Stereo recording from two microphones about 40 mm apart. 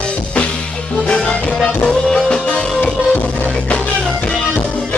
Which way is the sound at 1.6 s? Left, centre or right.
Centre.